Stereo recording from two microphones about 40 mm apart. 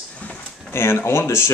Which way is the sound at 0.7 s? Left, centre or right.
Left.